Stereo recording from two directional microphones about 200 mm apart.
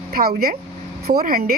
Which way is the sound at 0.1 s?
50° right (ahead or behind).